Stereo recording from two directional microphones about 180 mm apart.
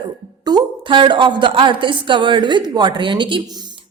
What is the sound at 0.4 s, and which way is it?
A woman's voice, 25° right (ahead or behind).